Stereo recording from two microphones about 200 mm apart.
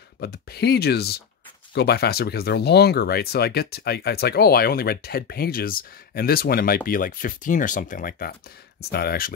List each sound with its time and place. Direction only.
0.2 s speech: 55° left (ahead or behind)